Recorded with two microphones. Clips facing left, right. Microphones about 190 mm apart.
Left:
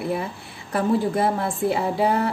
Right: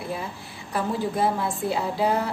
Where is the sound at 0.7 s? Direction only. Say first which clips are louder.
Left 5 dB; 60° left (ahead or behind).